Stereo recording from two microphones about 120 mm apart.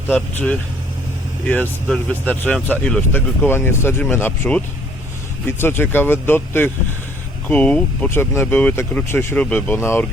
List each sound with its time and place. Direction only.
0.1 s speech: 10° left (ahead or behind)